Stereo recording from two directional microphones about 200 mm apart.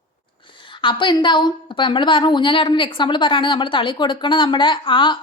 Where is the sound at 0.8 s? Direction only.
25° left (ahead or behind).